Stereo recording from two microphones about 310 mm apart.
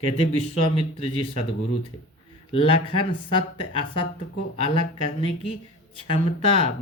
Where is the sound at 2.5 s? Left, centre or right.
Centre.